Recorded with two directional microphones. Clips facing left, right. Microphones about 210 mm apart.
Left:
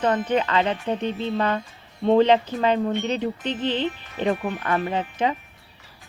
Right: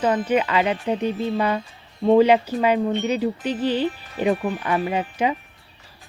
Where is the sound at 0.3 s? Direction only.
10° right (ahead or behind).